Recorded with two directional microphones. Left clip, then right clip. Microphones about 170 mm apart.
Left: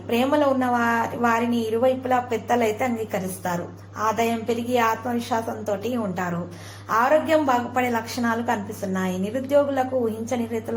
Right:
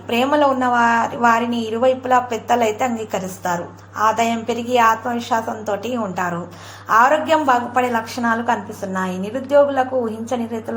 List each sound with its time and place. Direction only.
0.1 s a woman's voice: 20° right (ahead or behind)